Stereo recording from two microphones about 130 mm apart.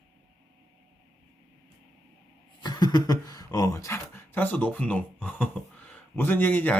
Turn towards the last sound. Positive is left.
turn(degrees=15)  # may be behind; listen again after turning